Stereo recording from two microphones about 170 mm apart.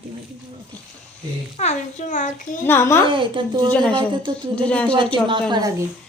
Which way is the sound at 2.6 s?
15° left (ahead or behind).